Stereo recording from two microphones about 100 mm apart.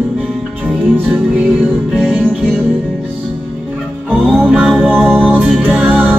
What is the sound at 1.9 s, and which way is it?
Music, 5° right (ahead or behind).